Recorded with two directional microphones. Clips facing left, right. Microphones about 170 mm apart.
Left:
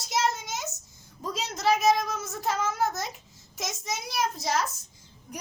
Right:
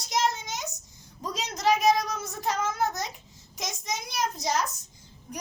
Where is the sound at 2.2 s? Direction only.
Centre (ahead or behind).